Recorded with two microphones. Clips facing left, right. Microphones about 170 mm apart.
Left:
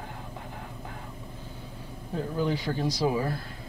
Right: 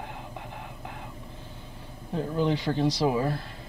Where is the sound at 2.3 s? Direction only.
20° right (ahead or behind).